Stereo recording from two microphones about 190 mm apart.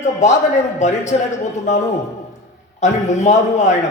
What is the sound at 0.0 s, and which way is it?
A man's voice, 40° left (ahead or behind).